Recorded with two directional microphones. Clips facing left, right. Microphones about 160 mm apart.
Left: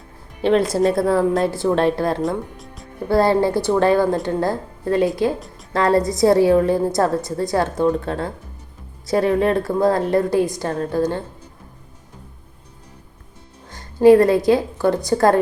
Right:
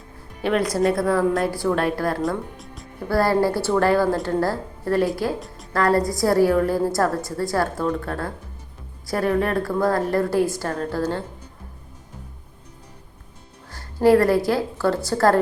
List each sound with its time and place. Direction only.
0.4 s a woman's voice: 25° left (ahead or behind)
2.2 s speech: centre (ahead or behind)
3.1 s a woman's voice: 20° left (ahead or behind)
13.7 s a woman's voice: 20° left (ahead or behind)